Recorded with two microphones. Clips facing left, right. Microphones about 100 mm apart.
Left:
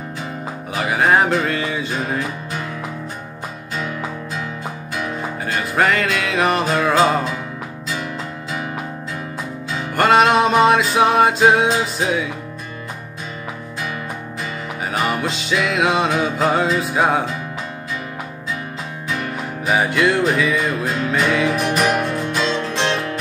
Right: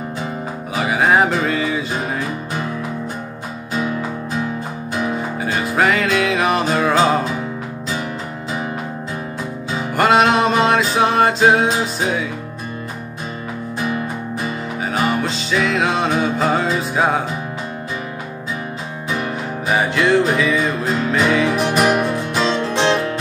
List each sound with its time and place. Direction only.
0.7 s music: centre (ahead or behind)
5.1 s music: 5° right (ahead or behind)
9.9 s music: centre (ahead or behind)
14.9 s music: centre (ahead or behind)
19.6 s music: centre (ahead or behind)
21.8 s music: 15° right (ahead or behind)